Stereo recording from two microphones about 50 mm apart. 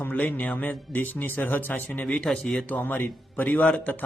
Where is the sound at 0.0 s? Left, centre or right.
Left.